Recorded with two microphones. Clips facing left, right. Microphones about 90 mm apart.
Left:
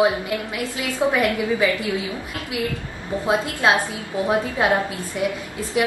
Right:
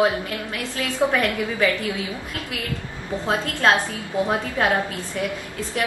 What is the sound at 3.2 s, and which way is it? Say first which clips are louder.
A woman's voice: left 1 dB; 15° left (ahead or behind).